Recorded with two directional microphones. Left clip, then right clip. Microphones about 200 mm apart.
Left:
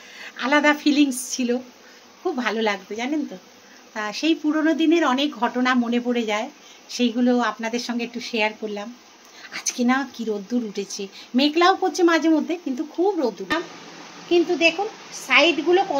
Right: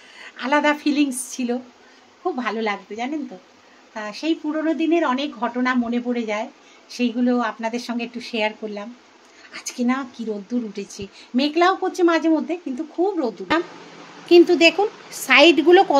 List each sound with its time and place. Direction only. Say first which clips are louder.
0.2 s a woman's voice: even; centre (ahead or behind)
14.3 s a woman's voice: right 5 dB; 60° right (ahead or behind)